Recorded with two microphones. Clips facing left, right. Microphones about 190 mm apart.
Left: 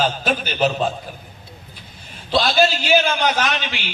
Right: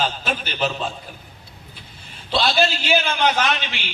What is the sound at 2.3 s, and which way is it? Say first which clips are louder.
A man's voice: left 3 dB; 40° left (ahead or behind).